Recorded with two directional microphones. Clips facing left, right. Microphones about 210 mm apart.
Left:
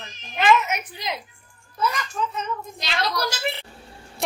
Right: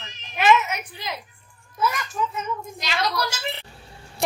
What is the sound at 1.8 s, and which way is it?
A woman's voice, 5° right (ahead or behind).